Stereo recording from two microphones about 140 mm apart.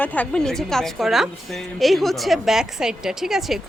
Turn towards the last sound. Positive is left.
turn(degrees=0)  # may be behind; listen again after turning